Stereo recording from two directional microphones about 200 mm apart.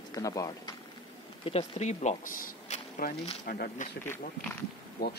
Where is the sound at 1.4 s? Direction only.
30° left (ahead or behind).